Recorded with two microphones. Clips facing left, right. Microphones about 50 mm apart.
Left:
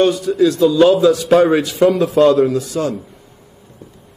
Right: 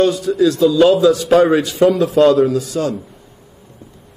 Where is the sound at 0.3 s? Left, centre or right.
Left.